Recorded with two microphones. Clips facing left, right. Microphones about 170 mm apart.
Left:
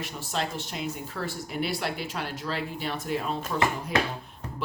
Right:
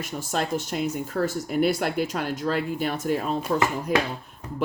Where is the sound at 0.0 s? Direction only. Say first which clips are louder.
Right 4 dB; 45° right (ahead or behind).